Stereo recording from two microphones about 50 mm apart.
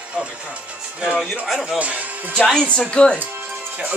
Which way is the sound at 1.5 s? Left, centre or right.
Centre.